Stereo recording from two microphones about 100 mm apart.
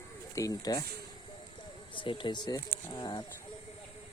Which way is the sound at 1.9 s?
55° left (ahead or behind).